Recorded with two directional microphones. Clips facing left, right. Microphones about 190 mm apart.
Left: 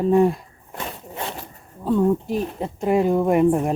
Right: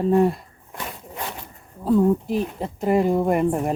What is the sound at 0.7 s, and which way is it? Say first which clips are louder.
Zipper: left 2 dB; 25° left (ahead or behind).